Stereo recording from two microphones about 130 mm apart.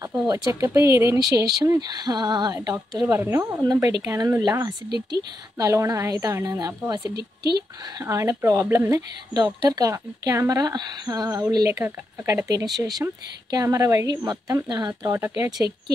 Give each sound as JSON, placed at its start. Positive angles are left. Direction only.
{"t": 0.3, "sound": "speech", "side_deg": -25}
{"t": 5.6, "sound": "speech", "side_deg": -25}
{"t": 8.0, "sound": "speech", "side_deg": -25}